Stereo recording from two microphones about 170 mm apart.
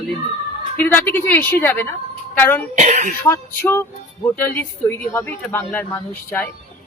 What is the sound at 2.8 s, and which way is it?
Speech, 45° right (ahead or behind).